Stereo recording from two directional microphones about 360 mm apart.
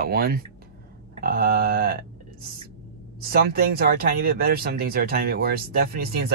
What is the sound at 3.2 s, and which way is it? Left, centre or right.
Speech, right.